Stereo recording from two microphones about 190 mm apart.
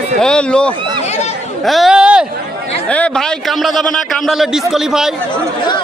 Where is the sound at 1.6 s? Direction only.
Centre (ahead or behind).